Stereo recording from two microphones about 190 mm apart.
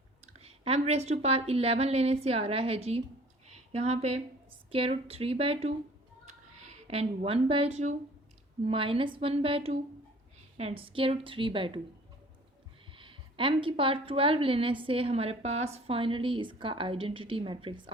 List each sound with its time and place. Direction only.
0.3 s a woman's voice: 35° right (ahead or behind)
6.2 s a sound: 35° right (ahead or behind)
8.6 s a woman's voice: 30° right (ahead or behind)
13.0 s a woman's voice: 25° right (ahead or behind)